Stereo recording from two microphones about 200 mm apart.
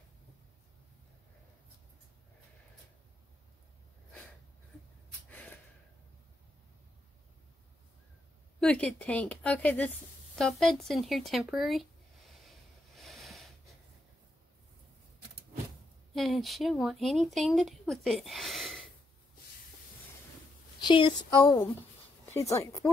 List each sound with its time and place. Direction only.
5.3 s gasp: 10° left (ahead or behind)
8.5 s speech: 5° left (ahead or behind)
12.4 s snort: centre (ahead or behind)
16.2 s speech: centre (ahead or behind)
20.8 s speech: 25° left (ahead or behind)